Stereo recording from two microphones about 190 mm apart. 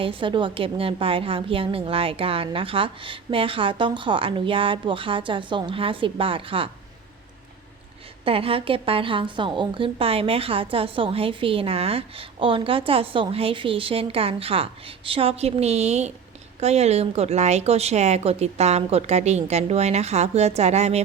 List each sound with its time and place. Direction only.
0.0 s a woman's voice: 25° right (ahead or behind)
8.2 s a woman's voice: 30° right (ahead or behind)